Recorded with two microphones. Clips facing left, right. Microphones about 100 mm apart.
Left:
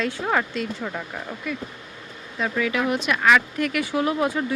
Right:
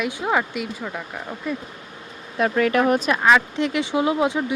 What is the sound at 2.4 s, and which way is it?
Speech, 55° right (ahead or behind).